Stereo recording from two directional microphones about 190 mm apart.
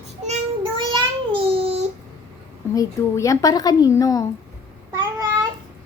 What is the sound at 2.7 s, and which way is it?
A woman's voice, 15° left (ahead or behind).